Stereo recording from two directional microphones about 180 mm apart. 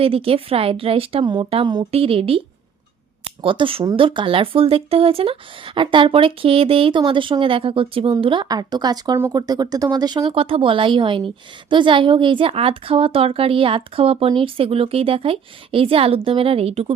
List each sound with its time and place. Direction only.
0.0 s a woman's voice: 30° right (ahead or behind)